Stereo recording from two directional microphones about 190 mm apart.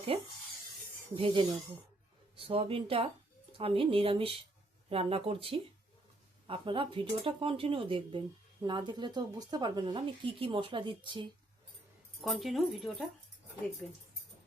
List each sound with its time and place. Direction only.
0.1 s speech: 30° right (ahead or behind)
12.2 s speech: centre (ahead or behind)